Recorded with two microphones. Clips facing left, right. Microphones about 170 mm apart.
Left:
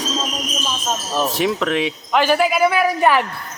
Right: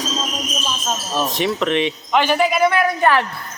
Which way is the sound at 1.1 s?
5° left (ahead or behind).